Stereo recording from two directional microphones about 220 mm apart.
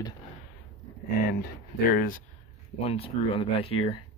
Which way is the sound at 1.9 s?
40° left (ahead or behind).